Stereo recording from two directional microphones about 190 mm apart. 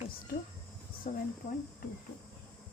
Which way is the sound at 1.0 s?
40° left (ahead or behind).